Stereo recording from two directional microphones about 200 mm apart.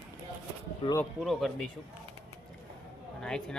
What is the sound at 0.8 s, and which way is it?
Speech, 25° left (ahead or behind).